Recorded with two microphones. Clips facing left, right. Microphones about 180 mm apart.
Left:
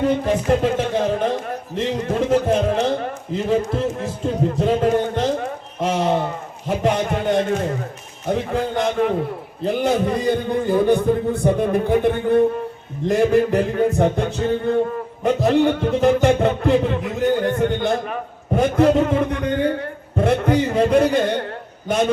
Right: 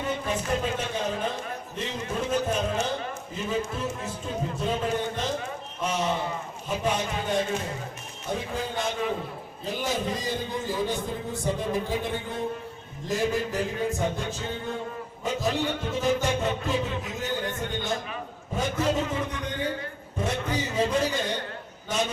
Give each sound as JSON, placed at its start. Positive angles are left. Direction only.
{"t": 0.0, "sound": "a sound", "side_deg": 65}
{"t": 8.3, "sound": "a man's voice", "side_deg": 60}
{"t": 15.2, "sound": "music", "side_deg": 60}
{"t": 21.8, "sound": "a man's voice", "side_deg": 60}